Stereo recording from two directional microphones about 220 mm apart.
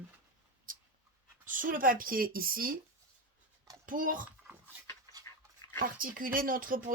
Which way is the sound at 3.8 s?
40° right (ahead or behind).